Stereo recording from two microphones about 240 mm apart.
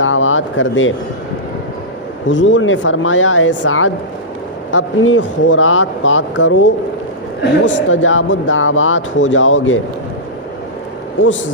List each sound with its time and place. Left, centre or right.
0.0 s a sound: left
2.2 s speech: left
7.6 s speech: left